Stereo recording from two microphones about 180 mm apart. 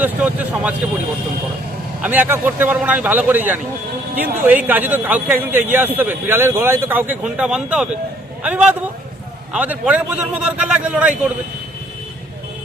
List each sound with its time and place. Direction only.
0.0 s speech: 10° right (ahead or behind)
2.0 s speech: 10° right (ahead or behind)